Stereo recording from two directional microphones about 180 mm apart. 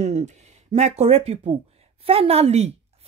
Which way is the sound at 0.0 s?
40° right (ahead or behind).